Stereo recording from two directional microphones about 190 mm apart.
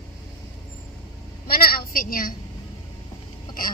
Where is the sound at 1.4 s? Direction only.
55° left (ahead or behind).